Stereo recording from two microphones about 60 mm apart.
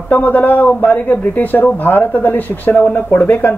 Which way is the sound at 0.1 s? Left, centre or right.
Left.